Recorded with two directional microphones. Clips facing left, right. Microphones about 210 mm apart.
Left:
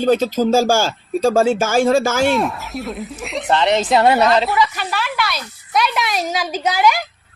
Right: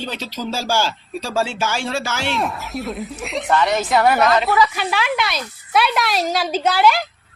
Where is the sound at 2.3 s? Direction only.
Centre (ahead or behind).